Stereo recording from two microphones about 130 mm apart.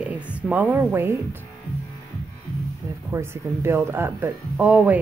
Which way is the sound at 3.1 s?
20° right (ahead or behind).